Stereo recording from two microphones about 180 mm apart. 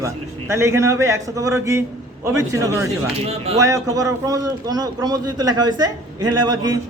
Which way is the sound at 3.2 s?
35° right (ahead or behind).